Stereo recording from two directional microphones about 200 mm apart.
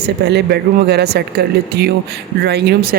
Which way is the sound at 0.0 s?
55° right (ahead or behind).